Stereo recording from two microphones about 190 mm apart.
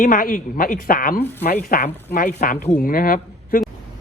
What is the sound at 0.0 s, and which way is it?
A woman's voice, 45° left (ahead or behind).